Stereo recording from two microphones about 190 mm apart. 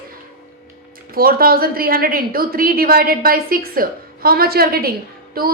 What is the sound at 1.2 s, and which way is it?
A woman's voice, 50° right (ahead or behind).